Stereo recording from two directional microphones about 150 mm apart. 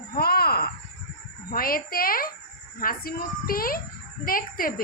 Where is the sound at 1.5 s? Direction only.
75° left (ahead or behind).